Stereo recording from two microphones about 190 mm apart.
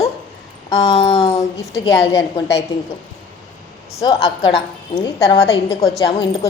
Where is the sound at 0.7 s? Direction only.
30° left (ahead or behind).